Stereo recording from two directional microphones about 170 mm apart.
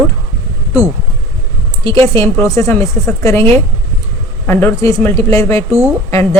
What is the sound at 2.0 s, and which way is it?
Speech, 20° left (ahead or behind).